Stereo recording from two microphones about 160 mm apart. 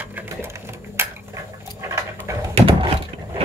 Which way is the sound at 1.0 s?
15° right (ahead or behind).